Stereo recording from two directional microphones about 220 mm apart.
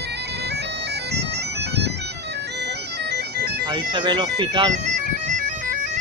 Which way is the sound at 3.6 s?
20° right (ahead or behind).